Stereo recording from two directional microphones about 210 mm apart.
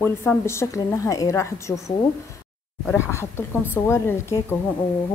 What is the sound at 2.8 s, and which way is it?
A woman's voice, 10° left (ahead or behind).